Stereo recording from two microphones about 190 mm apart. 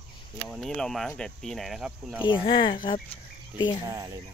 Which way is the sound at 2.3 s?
25° left (ahead or behind).